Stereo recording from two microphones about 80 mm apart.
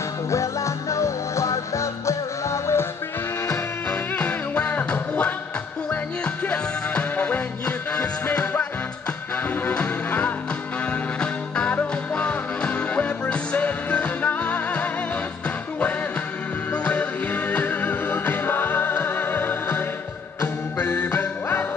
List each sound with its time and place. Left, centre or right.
0.3 s music: left
3.9 s music: centre
9.7 s music: centre
16.7 s music: centre